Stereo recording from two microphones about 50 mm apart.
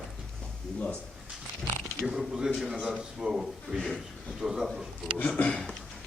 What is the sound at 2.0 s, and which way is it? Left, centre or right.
A man's voice, centre.